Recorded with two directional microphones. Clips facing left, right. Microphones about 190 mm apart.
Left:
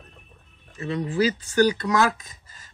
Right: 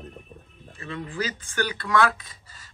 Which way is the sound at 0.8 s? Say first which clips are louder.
Left 8 dB; 30° left (ahead or behind).